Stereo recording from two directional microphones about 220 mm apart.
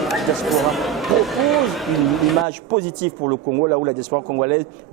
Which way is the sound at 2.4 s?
15° right (ahead or behind).